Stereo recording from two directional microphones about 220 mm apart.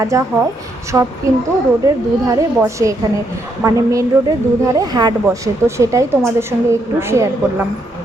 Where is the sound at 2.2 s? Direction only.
15° right (ahead or behind).